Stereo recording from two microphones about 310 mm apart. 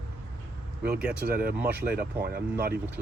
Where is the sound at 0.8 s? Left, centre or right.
Centre.